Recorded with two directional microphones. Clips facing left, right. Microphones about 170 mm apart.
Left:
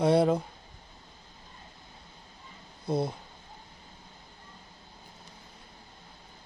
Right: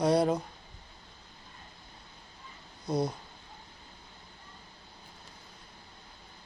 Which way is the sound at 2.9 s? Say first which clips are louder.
Left 1 dB; 25° left (ahead or behind).